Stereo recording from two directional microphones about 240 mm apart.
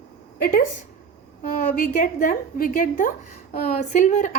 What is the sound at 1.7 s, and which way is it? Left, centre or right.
A woman's voice, left.